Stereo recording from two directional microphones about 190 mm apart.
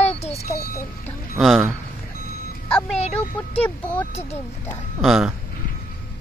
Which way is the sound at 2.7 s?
5° left (ahead or behind).